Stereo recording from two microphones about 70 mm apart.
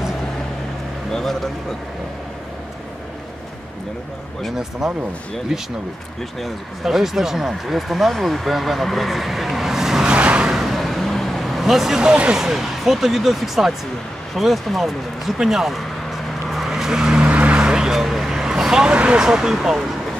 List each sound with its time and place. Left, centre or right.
1.1 s speech: centre
4.4 s speech: centre
10.1 s a sound: centre
10.5 s speech: centre
15.3 s vehicle: centre